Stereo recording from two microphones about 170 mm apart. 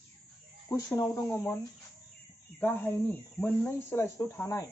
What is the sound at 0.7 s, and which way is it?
Speech, 20° left (ahead or behind).